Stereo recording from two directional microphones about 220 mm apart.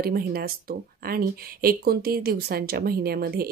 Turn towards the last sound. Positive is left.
turn(degrees=-45)  # may be behind; listen again after turning